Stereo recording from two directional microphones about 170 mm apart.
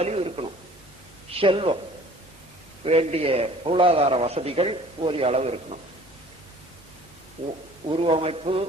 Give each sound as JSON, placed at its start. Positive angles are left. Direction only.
{"t": 0.0, "sound": "a sound", "side_deg": -35}
{"t": 1.4, "sound": "a man's voice", "side_deg": -30}
{"t": 2.8, "sound": "a man's voice", "side_deg": -35}
{"t": 7.9, "sound": "a man's voice", "side_deg": -30}